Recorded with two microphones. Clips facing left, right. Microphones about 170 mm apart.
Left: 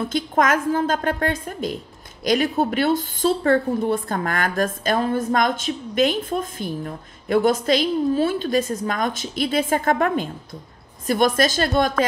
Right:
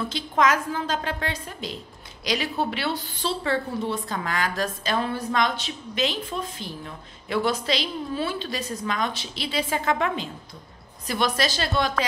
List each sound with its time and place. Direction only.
0.1 s a woman's voice: 50° left (ahead or behind)